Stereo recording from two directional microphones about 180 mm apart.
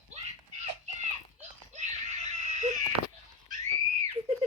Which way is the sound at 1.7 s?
40° right (ahead or behind).